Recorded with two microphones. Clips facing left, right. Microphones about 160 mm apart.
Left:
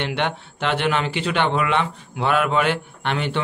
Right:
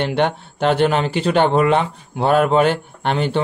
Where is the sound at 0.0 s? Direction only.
40° right (ahead or behind).